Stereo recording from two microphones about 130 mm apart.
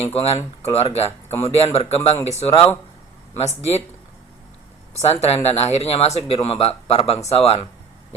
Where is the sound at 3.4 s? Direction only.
55° left (ahead or behind).